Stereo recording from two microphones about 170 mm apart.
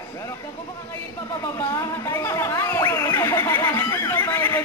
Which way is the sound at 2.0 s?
15° left (ahead or behind).